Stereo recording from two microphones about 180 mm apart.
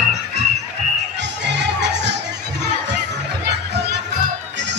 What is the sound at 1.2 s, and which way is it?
Music, 75° right (ahead or behind).